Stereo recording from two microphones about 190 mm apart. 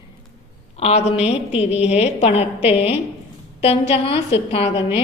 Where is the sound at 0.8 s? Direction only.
35° left (ahead or behind).